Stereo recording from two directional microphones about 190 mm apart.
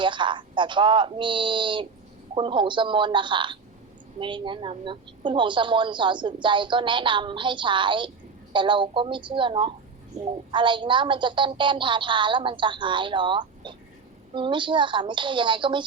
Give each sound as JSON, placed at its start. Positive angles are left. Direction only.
{"t": 0.0, "sound": "a woman's voice", "side_deg": -25}